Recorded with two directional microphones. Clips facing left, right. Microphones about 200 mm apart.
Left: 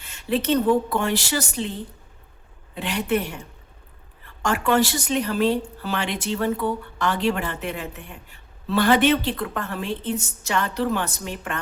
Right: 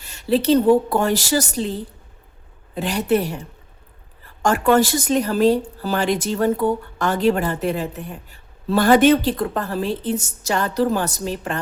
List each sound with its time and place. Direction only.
0.0 s speech: 35° right (ahead or behind)